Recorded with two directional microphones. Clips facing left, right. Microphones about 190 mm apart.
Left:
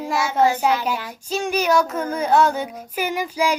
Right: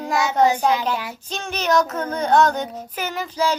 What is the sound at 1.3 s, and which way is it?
Child singing, 10° left (ahead or behind).